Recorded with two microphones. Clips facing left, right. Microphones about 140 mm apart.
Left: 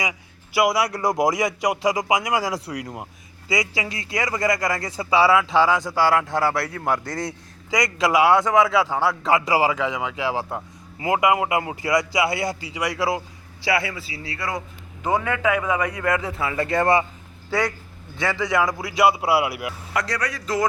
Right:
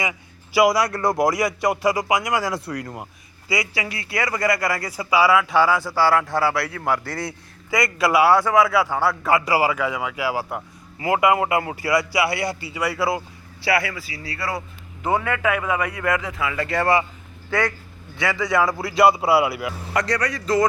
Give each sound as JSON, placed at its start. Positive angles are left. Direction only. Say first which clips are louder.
{"t": 0.5, "sound": "a man's voice", "louder": "right 3 dB", "side_deg": 0}
{"t": 0.9, "sound": "speech", "louder": "right 1 dB", "side_deg": 15}
{"t": 19.9, "sound": "a man's voice", "louder": "right 3 dB", "side_deg": 0}